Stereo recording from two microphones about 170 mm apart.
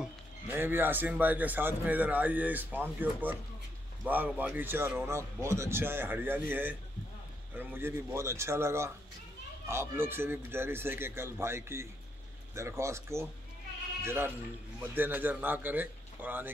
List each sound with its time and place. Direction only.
0.0 s a man's voice: 10° right (ahead or behind)